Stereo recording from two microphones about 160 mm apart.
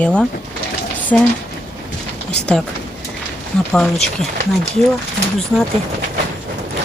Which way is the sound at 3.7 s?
5° left (ahead or behind).